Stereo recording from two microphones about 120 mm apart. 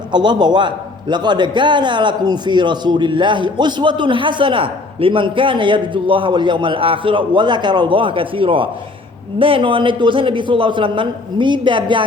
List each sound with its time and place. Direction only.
0.1 s a man's voice: 40° right (ahead or behind)